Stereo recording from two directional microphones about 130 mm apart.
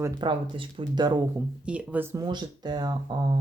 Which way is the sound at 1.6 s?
10° right (ahead or behind).